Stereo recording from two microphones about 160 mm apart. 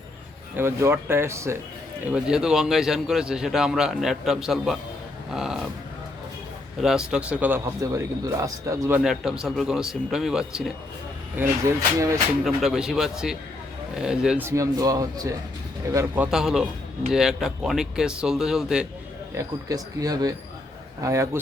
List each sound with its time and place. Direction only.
0.5 s speech: 15° right (ahead or behind)
2.0 s a man's voice: 5° right (ahead or behind)
6.8 s speech: 5° right (ahead or behind); by 9.0 s 20° right (ahead or behind)
9.0 s a man's voice: 5° right (ahead or behind)
11.9 s speech: 20° right (ahead or behind)
12.5 s a man's voice: centre (ahead or behind)
14.4 s speech: 20° right (ahead or behind)
16.2 s a man's voice: 5° right (ahead or behind)
19.3 s speech: 20° right (ahead or behind)